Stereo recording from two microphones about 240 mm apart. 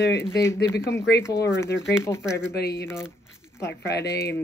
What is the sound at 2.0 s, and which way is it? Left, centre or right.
Speech, centre.